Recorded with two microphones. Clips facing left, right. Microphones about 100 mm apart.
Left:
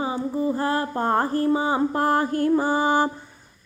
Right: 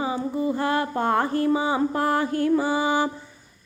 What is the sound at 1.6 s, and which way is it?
Music, 35° left (ahead or behind).